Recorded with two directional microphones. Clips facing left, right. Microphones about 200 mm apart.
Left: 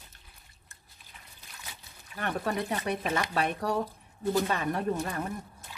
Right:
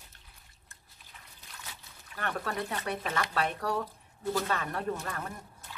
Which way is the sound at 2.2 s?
15° left (ahead or behind).